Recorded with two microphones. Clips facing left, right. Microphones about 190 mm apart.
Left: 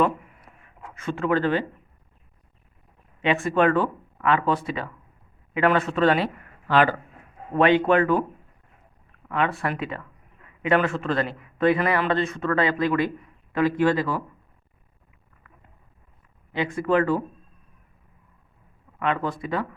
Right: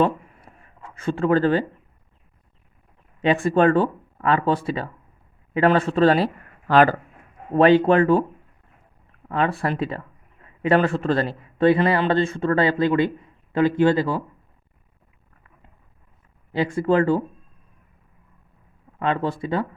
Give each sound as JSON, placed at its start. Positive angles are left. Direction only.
{"t": 0.0, "sound": "writing", "side_deg": -30}
{"t": 0.9, "sound": "speech", "side_deg": -35}
{"t": 3.2, "sound": "speech", "side_deg": -35}
{"t": 9.3, "sound": "a man's voice", "side_deg": -35}
{"t": 16.5, "sound": "speech", "side_deg": -30}
{"t": 18.9, "sound": "speech", "side_deg": -30}